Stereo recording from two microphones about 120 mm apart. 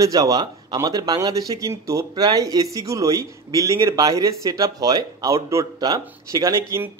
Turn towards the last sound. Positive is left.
turn(degrees=-25)  # may be behind; listen again after turning